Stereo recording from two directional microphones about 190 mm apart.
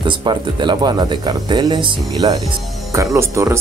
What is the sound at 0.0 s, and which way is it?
Speech, 25° right (ahead or behind).